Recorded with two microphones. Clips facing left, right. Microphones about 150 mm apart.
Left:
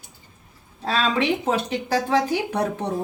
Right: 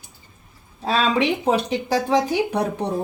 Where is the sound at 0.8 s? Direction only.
15° right (ahead or behind).